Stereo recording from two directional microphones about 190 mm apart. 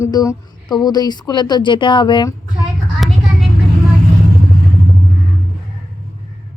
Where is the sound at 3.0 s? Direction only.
Centre (ahead or behind).